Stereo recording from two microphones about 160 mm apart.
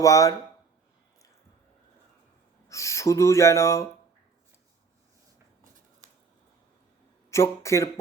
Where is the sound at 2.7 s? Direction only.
20° left (ahead or behind).